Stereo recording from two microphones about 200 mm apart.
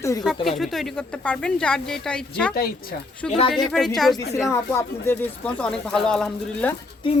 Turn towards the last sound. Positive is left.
turn(degrees=25)  # may be behind; listen again after turning